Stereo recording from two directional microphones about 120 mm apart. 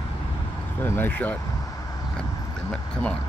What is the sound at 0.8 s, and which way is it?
Speech, 15° left (ahead or behind).